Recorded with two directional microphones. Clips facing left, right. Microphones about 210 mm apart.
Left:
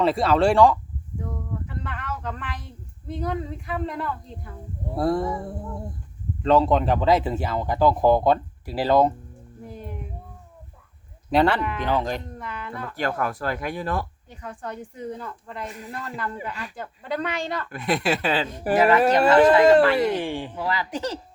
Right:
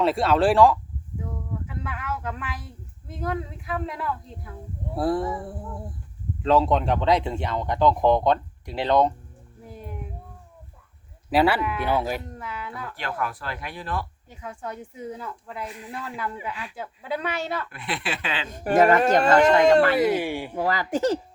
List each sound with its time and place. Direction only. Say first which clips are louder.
0.0 s speech: left 1 dB; centre (ahead or behind)
1.2 s a sound: left 1 dB; 5° right (ahead or behind)
4.9 s speech: left 1 dB; centre (ahead or behind)
9.6 s meow: left 2 dB; centre (ahead or behind)
11.3 s speech: left 1 dB; 5° right (ahead or behind)
13.0 s speech: left 5 dB; 45° left (ahead or behind)
14.3 s speech: even; 5° right (ahead or behind)
15.6 s speech: left 1 dB; 45° left (ahead or behind)
15.9 s speech: even; 10° right (ahead or behind)
17.7 s speech: left 7 dB; 40° left (ahead or behind)
18.8 s speech: right 1 dB; 45° right (ahead or behind)
19.2 s speech: left 5 dB; 5° left (ahead or behind); by 20.6 s 10° right (ahead or behind)
20.6 s speech: right 7 dB; 45° right (ahead or behind)